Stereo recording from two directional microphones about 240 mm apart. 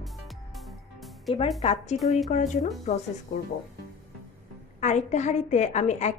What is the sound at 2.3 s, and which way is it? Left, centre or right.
A woman's voice, left.